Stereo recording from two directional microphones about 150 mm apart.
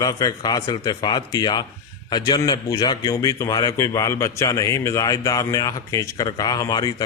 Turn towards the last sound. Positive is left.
turn(degrees=25)  # may be behind; listen again after turning